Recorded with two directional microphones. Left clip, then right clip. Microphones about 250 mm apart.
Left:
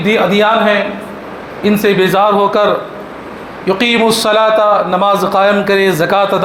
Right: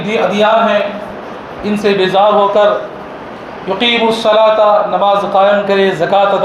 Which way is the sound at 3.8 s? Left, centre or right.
Left.